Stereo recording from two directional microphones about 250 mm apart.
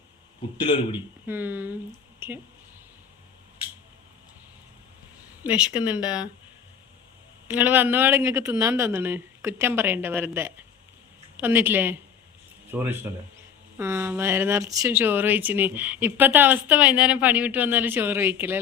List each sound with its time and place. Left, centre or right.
0.5 s speech: centre
1.3 s speech: centre
5.4 s speech: centre
7.4 s speech: centre